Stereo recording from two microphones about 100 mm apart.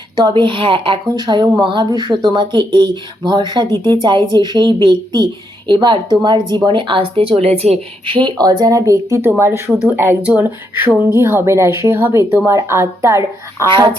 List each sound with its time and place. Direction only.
0.2 s a woman's voice: 45° right (ahead or behind)
1.0 s speech: 45° right (ahead or behind)
3.7 s a woman's voice: 25° left (ahead or behind)
4.3 s a woman's voice: 45° right (ahead or behind)
8.4 s speech: 40° right (ahead or behind)